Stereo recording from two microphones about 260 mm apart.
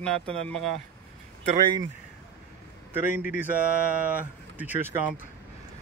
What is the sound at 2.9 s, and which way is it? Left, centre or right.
A man's voice, centre.